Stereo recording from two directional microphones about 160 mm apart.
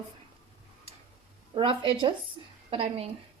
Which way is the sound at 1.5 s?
30° right (ahead or behind).